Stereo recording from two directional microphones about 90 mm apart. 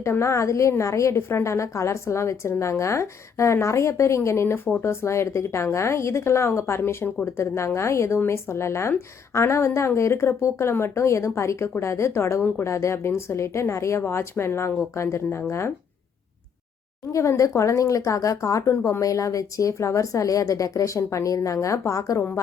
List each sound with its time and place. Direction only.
0.0 s a woman's voice: 30° left (ahead or behind)
17.1 s speech: 35° left (ahead or behind)